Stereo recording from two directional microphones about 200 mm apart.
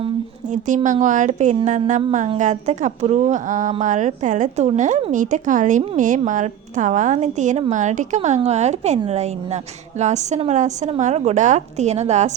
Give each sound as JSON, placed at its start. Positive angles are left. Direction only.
{"t": 0.0, "sound": "a woman's voice", "side_deg": -35}